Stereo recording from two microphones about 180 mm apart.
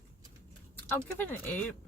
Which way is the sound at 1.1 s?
10° left (ahead or behind).